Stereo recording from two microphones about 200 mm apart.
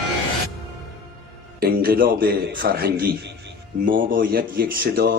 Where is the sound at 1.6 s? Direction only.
50° right (ahead or behind).